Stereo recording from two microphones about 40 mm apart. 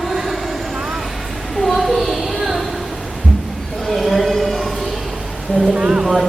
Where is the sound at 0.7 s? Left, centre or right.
Centre.